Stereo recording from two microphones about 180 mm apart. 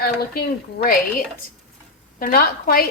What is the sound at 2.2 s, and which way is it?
Speech, 55° left (ahead or behind).